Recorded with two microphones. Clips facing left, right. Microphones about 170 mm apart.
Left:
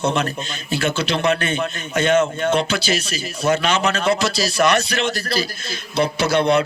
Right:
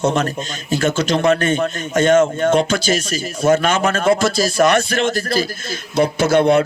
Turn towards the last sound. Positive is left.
turn(degrees=-45)  # may be behind; listen again after turning